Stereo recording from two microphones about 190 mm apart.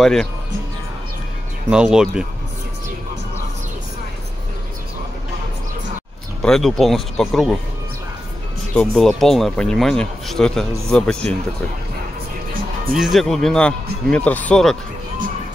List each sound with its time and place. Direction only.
0.0 s speech: centre (ahead or behind)
1.7 s speech: 5° right (ahead or behind)
6.4 s speech: centre (ahead or behind)
8.7 s speech: centre (ahead or behind)
12.9 s speech: centre (ahead or behind)